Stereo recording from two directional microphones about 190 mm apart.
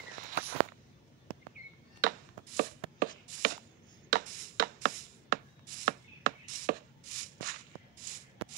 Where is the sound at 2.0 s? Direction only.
45° right (ahead or behind).